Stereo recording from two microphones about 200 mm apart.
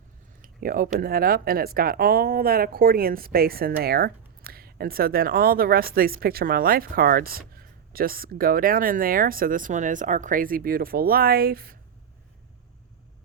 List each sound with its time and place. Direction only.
0.4 s speech: 45° right (ahead or behind)